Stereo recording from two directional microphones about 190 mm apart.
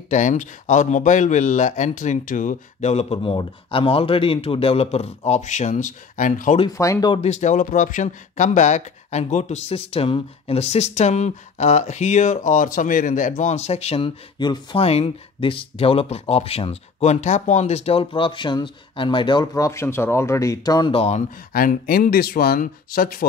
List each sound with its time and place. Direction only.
0.1 s speech: 40° left (ahead or behind)
6.8 s speech: 20° left (ahead or behind)
7.2 s speech: 40° left (ahead or behind)
21.5 s speech: 50° left (ahead or behind)